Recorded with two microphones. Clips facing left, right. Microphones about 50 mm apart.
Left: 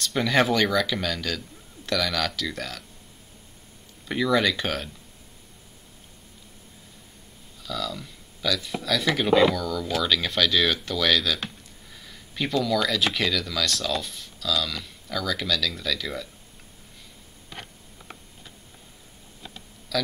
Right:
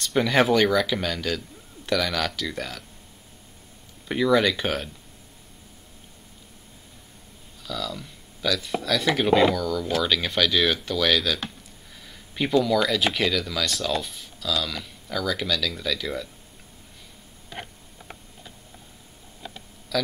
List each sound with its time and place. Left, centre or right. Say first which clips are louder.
0.0 s speech: right 2 dB; centre
4.1 s speech: right 2 dB; centre
7.6 s speech: even; centre
17.6 s a sound: right 4 dB; centre
19.9 s a man's voice: right 1 dB; centre